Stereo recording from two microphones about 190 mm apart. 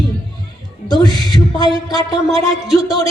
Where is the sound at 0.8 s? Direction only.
20° left (ahead or behind).